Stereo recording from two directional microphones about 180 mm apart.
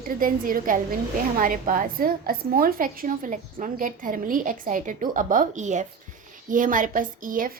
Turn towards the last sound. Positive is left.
turn(degrees=-50)  # may be behind; listen again after turning